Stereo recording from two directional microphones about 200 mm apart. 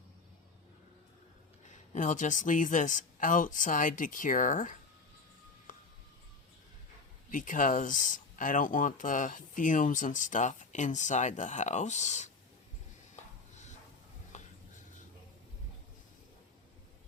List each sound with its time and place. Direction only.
1.7 s speech: 35° left (ahead or behind)
5.7 s music: 40° left (ahead or behind)
7.3 s speech: 40° left (ahead or behind)
14.3 s a sound: 35° left (ahead or behind)